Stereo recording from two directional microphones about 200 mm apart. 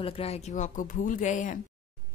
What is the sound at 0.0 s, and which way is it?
A woman's voice, 30° left (ahead or behind).